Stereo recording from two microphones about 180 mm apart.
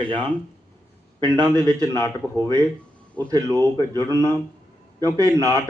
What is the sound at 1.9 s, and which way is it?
Speech, 15° left (ahead or behind).